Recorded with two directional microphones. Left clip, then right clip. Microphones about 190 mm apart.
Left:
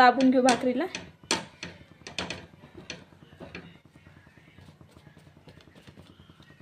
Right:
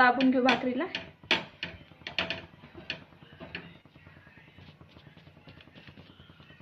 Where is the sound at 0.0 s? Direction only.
45° left (ahead or behind).